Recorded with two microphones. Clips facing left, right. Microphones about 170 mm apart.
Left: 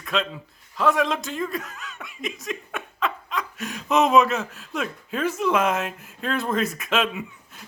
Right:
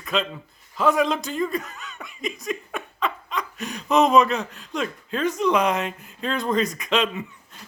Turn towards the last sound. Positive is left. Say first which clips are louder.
# right 1 dB
turn(degrees=5)  # may be behind; listen again after turning